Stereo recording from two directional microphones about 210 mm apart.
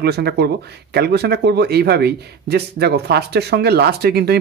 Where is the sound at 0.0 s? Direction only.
50° right (ahead or behind).